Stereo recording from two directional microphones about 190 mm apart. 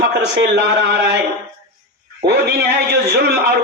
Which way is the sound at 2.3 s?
60° right (ahead or behind).